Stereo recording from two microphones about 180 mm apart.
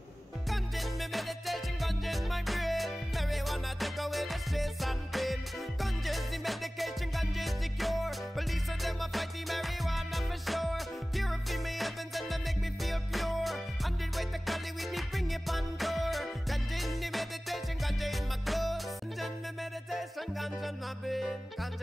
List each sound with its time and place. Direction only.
0.5 s music: centre (ahead or behind)